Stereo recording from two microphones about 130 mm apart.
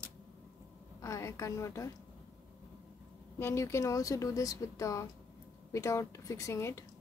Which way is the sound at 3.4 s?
20° left (ahead or behind).